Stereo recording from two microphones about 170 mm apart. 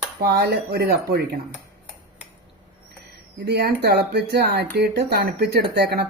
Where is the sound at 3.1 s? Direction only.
70° right (ahead or behind).